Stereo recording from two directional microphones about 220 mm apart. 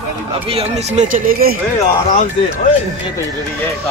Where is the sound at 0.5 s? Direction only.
35° right (ahead or behind).